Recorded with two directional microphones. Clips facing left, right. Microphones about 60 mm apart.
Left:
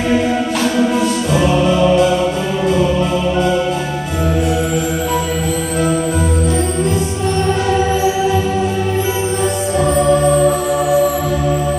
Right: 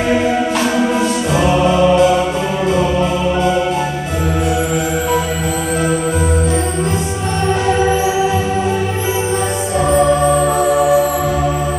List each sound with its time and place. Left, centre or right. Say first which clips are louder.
1.3 s music: right 1 dB; centre